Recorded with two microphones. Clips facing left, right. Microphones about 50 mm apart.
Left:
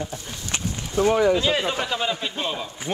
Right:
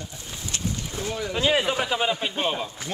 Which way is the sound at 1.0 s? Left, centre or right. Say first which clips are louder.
Left 14 dB; left.